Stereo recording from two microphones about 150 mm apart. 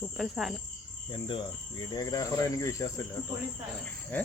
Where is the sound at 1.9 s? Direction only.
25° left (ahead or behind).